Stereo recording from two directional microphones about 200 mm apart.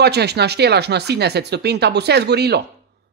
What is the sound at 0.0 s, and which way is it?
Speech, 55° right (ahead or behind).